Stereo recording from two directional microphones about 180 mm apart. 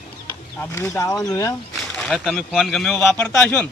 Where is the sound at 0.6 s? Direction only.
15° left (ahead or behind).